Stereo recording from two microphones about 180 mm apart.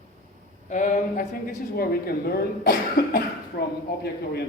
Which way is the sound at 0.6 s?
45° left (ahead or behind).